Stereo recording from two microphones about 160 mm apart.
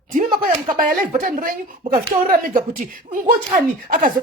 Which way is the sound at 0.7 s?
60° right (ahead or behind).